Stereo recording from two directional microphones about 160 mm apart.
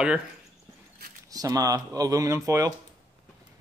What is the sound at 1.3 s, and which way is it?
Speech, 25° right (ahead or behind).